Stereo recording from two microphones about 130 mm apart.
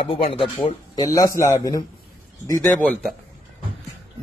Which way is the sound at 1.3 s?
25° left (ahead or behind).